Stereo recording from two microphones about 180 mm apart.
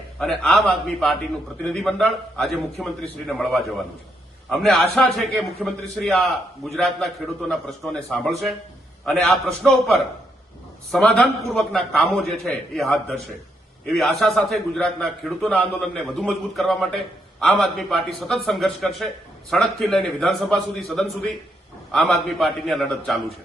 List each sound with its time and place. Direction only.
0.2 s a man's voice: centre (ahead or behind)